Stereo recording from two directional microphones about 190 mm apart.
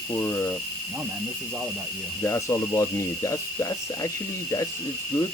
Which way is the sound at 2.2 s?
15° left (ahead or behind).